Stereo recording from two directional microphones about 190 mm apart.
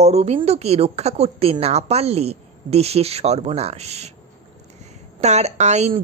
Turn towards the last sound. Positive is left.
turn(degrees=-35)  # may be behind; listen again after turning